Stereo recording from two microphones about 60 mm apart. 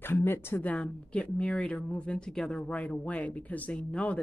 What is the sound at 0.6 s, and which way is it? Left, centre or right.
Speech, left.